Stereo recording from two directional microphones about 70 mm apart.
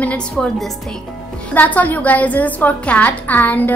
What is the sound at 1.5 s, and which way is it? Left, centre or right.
A woman's voice, left.